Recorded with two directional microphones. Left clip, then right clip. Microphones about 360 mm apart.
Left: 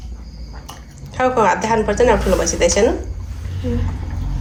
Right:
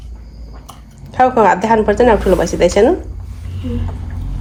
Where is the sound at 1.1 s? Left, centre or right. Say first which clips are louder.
Right 5 dB; right.